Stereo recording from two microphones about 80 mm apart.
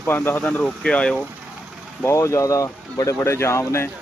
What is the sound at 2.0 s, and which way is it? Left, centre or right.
Speech, left.